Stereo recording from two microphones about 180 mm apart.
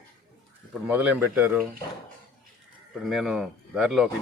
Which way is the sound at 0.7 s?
10° right (ahead or behind).